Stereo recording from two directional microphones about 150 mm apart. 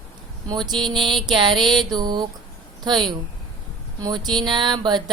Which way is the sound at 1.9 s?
30° right (ahead or behind).